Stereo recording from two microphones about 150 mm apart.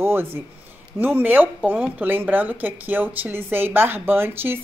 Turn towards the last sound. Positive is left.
turn(degrees=-15)  # may be behind; listen again after turning